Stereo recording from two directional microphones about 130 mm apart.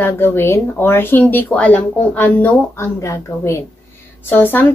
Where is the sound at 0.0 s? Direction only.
15° left (ahead or behind).